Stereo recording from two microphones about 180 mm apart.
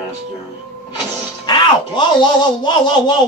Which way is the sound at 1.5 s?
25° left (ahead or behind).